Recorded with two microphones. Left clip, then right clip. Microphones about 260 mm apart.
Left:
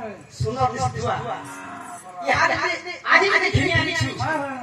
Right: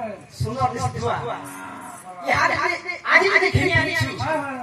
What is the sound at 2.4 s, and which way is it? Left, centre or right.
Speech, right.